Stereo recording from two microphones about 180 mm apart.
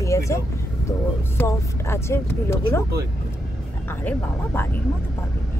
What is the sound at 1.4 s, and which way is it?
Vehicle, 15° left (ahead or behind).